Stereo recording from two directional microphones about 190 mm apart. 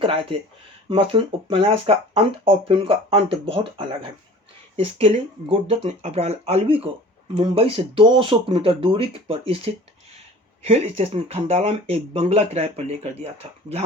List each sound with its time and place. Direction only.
0.0 s speech: 30° right (ahead or behind)